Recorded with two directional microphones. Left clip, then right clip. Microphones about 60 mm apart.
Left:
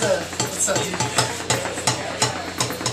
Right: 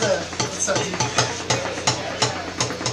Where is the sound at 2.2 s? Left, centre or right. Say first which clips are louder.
Even; centre.